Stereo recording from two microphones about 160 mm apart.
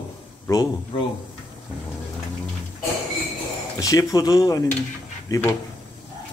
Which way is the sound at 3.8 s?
20° left (ahead or behind).